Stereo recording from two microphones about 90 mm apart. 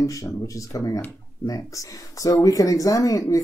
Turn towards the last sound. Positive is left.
turn(degrees=40)  # may be behind; listen again after turning